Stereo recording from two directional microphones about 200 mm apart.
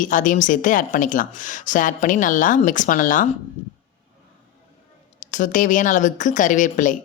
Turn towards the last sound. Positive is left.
turn(degrees=40)  # may be behind; listen again after turning